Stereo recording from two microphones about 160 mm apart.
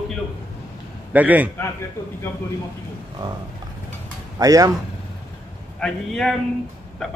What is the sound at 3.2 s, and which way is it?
Speech, 25° right (ahead or behind).